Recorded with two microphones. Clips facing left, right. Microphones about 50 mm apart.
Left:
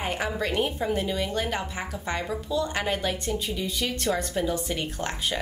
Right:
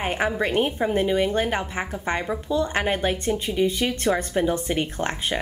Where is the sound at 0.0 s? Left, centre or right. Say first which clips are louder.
Right 5 dB; right.